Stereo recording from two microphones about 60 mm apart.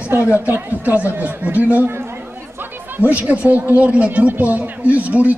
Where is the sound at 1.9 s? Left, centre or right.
Right.